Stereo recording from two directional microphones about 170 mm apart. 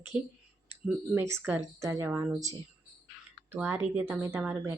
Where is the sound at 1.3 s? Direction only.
15° right (ahead or behind).